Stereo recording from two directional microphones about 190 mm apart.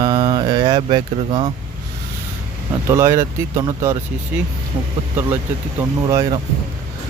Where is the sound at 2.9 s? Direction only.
15° right (ahead or behind).